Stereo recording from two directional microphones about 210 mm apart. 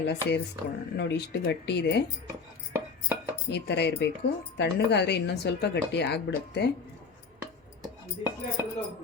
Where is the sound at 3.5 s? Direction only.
55° left (ahead or behind).